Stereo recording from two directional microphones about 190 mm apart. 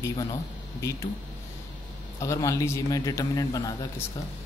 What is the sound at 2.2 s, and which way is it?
A man's voice, 15° left (ahead or behind).